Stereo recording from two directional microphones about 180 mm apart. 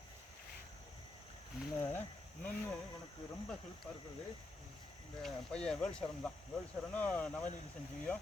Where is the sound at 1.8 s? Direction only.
10° left (ahead or behind).